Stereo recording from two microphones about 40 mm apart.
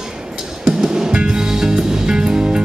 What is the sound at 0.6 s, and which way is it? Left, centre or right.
Music, centre.